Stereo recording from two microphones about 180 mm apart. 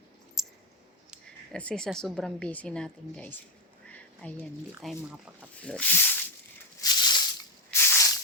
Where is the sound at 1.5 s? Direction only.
5° left (ahead or behind).